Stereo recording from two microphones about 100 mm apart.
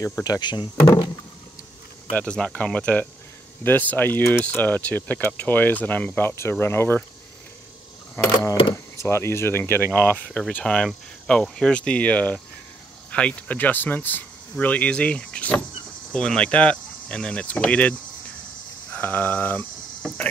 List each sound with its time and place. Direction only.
0.2 s speech: 45° left (ahead or behind)
2.1 s speech: 10° left (ahead or behind); by 7.0 s 25° left (ahead or behind)
8.3 s speech: 40° left (ahead or behind)
8.7 s speech: 25° left (ahead or behind)
18.9 s cricket: 20° left (ahead or behind)